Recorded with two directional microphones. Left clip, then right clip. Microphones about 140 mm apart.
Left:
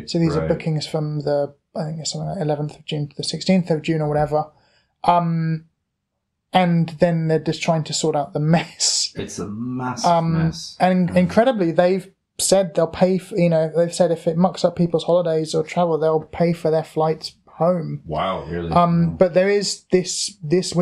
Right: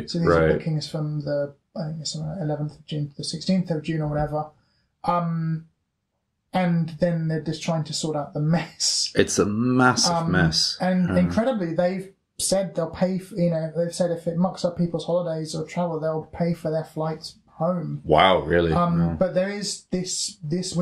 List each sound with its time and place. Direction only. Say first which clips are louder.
0.0 s speech: right 2 dB; 25° left (ahead or behind)
9.1 s speech: right 9 dB; 30° right (ahead or behind)
10.8 s speech: left 6 dB; 25° left (ahead or behind)